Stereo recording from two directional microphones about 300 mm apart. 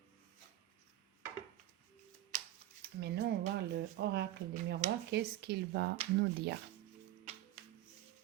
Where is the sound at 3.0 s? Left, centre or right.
Right.